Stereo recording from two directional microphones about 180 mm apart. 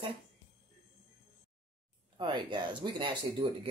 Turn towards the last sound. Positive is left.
turn(degrees=-25)  # may be behind; listen again after turning